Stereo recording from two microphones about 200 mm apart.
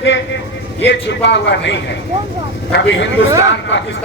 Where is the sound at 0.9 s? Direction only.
60° left (ahead or behind).